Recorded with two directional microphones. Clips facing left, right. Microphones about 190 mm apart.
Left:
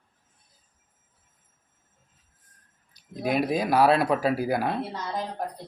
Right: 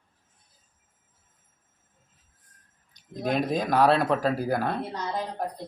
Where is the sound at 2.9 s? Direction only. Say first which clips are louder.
Left 1 dB; 10° left (ahead or behind).